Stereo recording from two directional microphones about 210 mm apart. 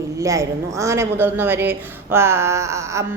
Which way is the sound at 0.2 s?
15° right (ahead or behind).